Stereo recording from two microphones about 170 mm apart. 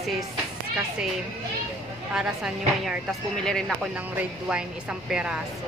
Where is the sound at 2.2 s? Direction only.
5° right (ahead or behind).